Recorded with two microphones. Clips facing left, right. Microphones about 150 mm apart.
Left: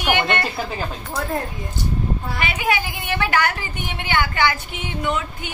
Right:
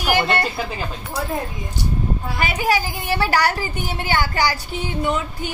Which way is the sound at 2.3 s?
40° right (ahead or behind).